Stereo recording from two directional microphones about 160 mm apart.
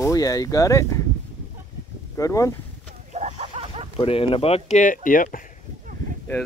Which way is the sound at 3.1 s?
45° right (ahead or behind).